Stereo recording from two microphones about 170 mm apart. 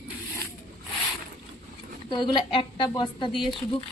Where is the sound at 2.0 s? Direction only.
30° left (ahead or behind).